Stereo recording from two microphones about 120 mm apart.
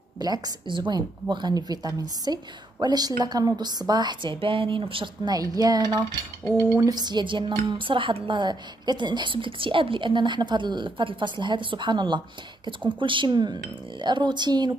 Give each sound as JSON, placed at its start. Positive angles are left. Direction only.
{"t": 0.2, "sound": "a woman's voice", "side_deg": -35}